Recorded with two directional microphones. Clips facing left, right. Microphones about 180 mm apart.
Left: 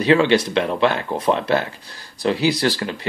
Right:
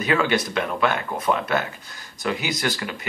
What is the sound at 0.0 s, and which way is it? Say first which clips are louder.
Speech: left 6 dB; 30° left (ahead or behind).